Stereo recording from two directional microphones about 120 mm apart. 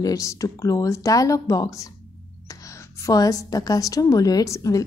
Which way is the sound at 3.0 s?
30° left (ahead or behind).